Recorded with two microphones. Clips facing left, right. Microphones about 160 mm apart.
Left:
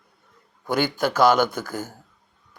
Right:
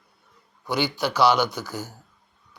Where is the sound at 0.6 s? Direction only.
50° left (ahead or behind).